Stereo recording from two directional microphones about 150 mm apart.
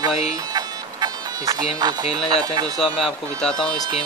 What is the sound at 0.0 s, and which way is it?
Music, 25° right (ahead or behind).